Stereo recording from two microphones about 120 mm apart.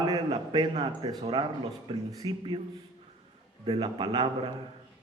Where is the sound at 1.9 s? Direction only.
30° right (ahead or behind).